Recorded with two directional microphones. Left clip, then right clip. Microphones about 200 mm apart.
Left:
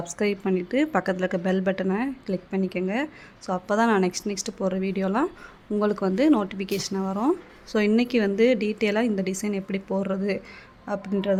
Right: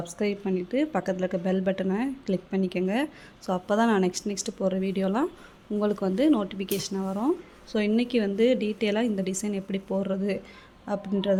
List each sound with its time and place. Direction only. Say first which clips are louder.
0.1 s speech: left 4 dB; 5° right (ahead or behind)
2.0 s speech: left 1 dB; 15° right (ahead or behind)